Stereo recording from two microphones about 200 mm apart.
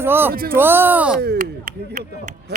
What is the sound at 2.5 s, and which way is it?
Speech, 60° right (ahead or behind).